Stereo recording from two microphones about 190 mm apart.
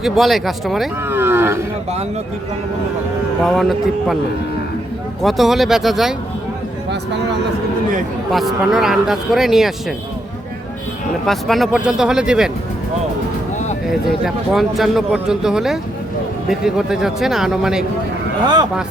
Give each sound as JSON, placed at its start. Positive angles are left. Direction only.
{"t": 0.0, "sound": "a man's voice", "side_deg": 0}
{"t": 1.0, "sound": "speech", "side_deg": -10}
{"t": 3.4, "sound": "a man's voice", "side_deg": 0}
{"t": 5.2, "sound": "a man's voice", "side_deg": 0}
{"t": 8.3, "sound": "a man's voice", "side_deg": 0}
{"t": 11.3, "sound": "a man's voice", "side_deg": 0}
{"t": 13.9, "sound": "a man's voice", "side_deg": 0}
{"t": 18.4, "sound": "speech", "side_deg": -20}